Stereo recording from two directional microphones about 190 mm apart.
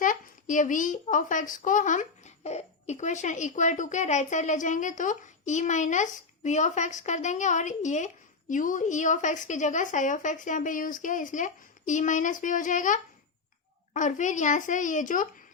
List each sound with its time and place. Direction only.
0.0 s a woman's voice: 45° left (ahead or behind)